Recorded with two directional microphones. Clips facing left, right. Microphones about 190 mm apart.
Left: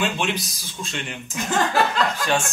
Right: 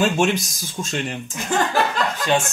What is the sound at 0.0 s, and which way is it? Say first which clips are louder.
Speech: right 6 dB; 45° right (ahead or behind).